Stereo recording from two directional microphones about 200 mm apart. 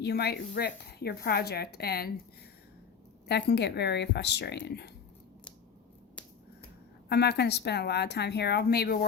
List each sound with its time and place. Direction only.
0.0 s speech: 55° left (ahead or behind)
3.2 s speech: 55° left (ahead or behind)
7.1 s speech: 55° left (ahead or behind)